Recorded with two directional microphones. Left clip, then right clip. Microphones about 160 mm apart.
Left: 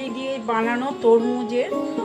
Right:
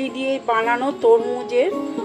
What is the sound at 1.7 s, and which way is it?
Speech, centre (ahead or behind).